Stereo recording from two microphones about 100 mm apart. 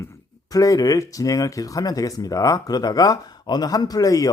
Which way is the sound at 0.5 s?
35° left (ahead or behind).